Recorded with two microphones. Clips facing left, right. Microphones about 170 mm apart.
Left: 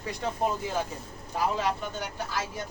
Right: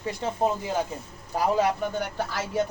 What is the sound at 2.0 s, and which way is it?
Speech, 60° right (ahead or behind).